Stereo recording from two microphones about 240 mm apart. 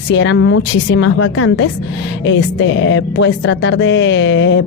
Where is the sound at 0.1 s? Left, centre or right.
Left.